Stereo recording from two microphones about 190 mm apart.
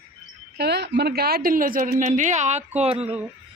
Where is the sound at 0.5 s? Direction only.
60° right (ahead or behind).